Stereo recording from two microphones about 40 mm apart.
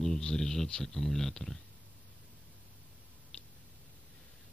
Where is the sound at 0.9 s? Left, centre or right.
Centre.